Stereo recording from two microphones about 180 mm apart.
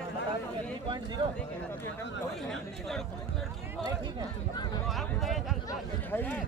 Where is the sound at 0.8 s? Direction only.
25° right (ahead or behind).